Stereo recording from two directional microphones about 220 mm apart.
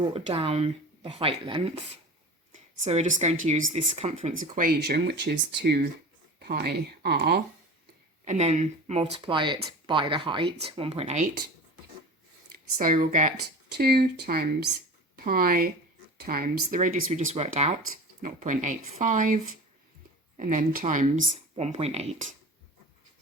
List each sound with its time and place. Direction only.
0.0 s speech: 25° right (ahead or behind)
2.5 s a sound: 30° right (ahead or behind)
3.4 s speech: 35° right (ahead or behind); by 7.4 s 50° right (ahead or behind)
8.2 s speech: 30° right (ahead or behind)
12.5 s speech: 40° right (ahead or behind)
13.7 s speech: 45° right (ahead or behind)